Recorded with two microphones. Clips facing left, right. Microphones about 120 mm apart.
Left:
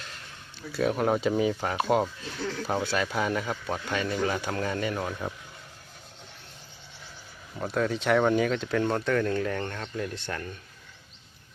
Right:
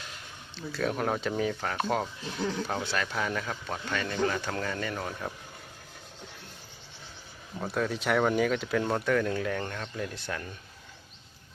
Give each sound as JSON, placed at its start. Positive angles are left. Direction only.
{"t": 0.5, "sound": "speech", "side_deg": 10}
{"t": 2.4, "sound": "speech", "side_deg": -20}
{"t": 2.9, "sound": "speech", "side_deg": 10}
{"t": 7.6, "sound": "speech", "side_deg": 0}